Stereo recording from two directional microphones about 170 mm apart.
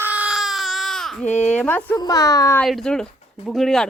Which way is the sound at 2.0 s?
20° left (ahead or behind).